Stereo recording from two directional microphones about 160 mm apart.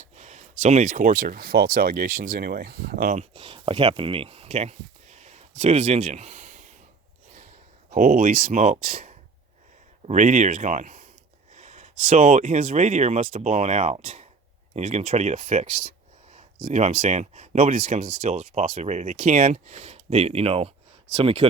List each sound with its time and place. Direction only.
0.0 s speech: 45° right (ahead or behind); by 3.2 s 65° right (ahead or behind)
3.2 s speech: 35° right (ahead or behind)
7.9 s speech: 55° right (ahead or behind); by 21.4 s 35° right (ahead or behind)